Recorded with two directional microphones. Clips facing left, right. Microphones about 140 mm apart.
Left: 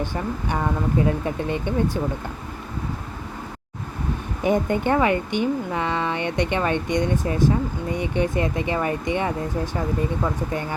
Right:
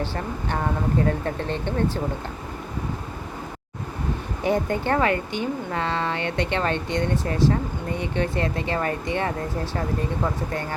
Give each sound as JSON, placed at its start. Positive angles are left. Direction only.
{"t": 0.0, "sound": "speech", "side_deg": 15}
{"t": 4.4, "sound": "speech", "side_deg": 20}
{"t": 10.5, "sound": "speech", "side_deg": 15}